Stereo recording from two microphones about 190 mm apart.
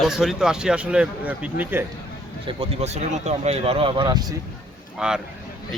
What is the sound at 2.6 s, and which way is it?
Speech, 35° right (ahead or behind).